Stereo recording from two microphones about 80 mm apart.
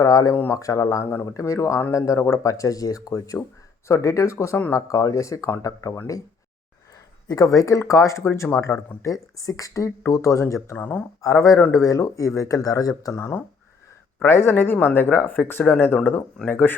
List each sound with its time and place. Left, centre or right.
0.0 s speech: left
7.3 s speech: left
10.8 s speech: left
11.2 s speech: left